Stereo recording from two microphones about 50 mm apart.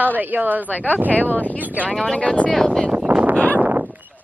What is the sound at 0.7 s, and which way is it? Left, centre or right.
Speech, left.